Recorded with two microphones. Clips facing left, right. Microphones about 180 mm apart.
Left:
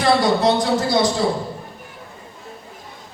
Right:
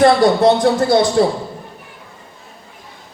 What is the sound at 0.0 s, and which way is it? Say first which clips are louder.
Speech: right 6 dB; 55° right (ahead or behind).